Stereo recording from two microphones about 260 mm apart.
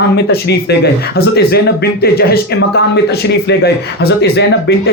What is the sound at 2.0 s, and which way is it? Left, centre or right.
Speech, left.